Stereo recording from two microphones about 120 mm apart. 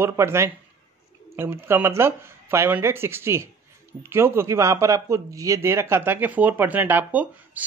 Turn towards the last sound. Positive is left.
turn(degrees=-15)  # may be behind; listen again after turning